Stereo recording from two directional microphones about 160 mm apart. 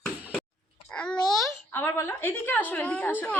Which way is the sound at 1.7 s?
15° left (ahead or behind).